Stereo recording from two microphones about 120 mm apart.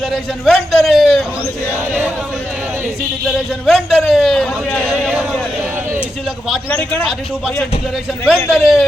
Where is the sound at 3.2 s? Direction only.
Centre (ahead or behind).